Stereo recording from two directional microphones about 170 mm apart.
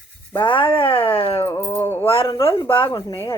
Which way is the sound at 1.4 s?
15° left (ahead or behind).